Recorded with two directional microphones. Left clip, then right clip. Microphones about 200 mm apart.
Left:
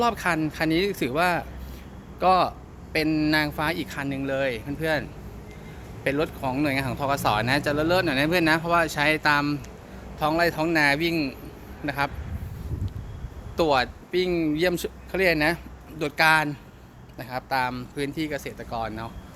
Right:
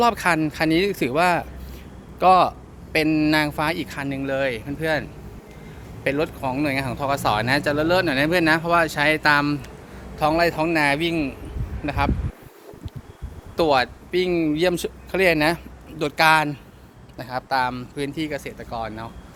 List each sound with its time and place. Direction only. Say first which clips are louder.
0.0 s speech: right 5 dB; 20° right (ahead or behind); by 12.1 s centre (ahead or behind)
13.6 s speech: right 3 dB; 10° right (ahead or behind); by 19.1 s 15° left (ahead or behind)